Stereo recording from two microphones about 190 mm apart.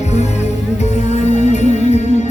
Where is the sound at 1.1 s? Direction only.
35° left (ahead or behind).